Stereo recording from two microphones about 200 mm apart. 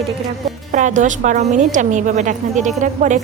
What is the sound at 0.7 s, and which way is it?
A woman's voice, 40° right (ahead or behind).